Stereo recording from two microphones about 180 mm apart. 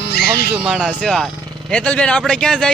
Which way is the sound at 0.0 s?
65° left (ahead or behind).